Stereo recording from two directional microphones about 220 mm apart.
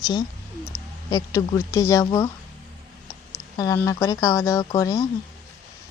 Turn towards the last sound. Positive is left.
turn(degrees=15)  # may be behind; listen again after turning